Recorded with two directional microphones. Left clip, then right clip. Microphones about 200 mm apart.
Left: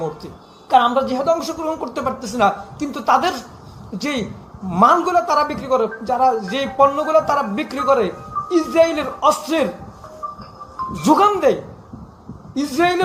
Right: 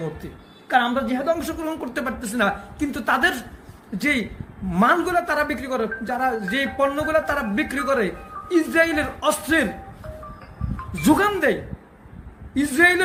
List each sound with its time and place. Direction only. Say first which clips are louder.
0.7 s speech: left 6 dB; 15° right (ahead or behind)
11.0 s speech: left 5 dB; 20° right (ahead or behind)